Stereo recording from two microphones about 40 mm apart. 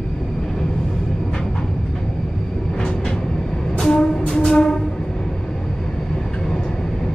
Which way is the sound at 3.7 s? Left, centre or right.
Centre.